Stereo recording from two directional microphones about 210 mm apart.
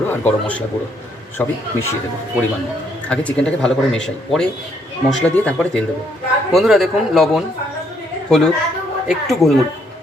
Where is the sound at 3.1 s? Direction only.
5° left (ahead or behind).